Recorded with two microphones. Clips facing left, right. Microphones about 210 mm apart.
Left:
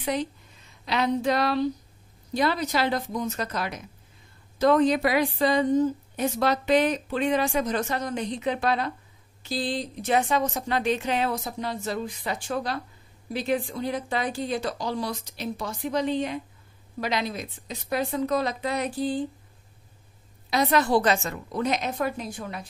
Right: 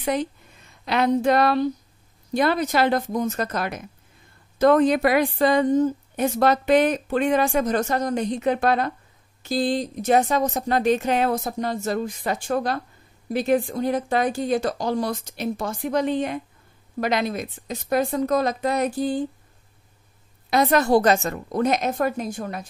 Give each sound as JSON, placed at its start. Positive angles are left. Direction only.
{"t": 0.0, "sound": "a woman's voice", "side_deg": -50}
{"t": 20.4, "sound": "a woman's voice", "side_deg": -50}